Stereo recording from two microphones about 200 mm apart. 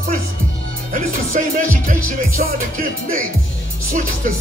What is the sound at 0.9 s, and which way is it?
Music, 40° right (ahead or behind).